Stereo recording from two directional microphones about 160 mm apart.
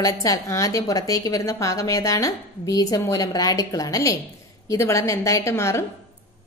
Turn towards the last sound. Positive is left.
turn(degrees=15)  # may be behind; listen again after turning